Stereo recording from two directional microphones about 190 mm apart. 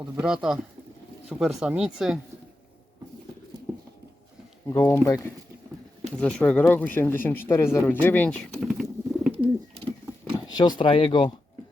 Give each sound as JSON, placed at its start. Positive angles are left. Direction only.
{"t": 0.0, "sound": "speech", "side_deg": 0}
{"t": 4.6, "sound": "speech", "side_deg": 15}
{"t": 6.1, "sound": "speech", "side_deg": 5}
{"t": 10.6, "sound": "speech", "side_deg": 25}